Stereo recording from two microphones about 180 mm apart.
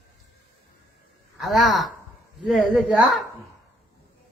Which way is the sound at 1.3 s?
Centre (ahead or behind).